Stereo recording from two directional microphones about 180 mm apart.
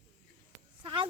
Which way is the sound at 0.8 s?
25° right (ahead or behind).